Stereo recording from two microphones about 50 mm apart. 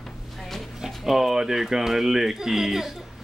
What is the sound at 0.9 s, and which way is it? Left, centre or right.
Speech, centre.